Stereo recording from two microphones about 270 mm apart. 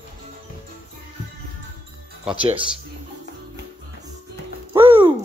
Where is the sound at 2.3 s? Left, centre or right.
Centre.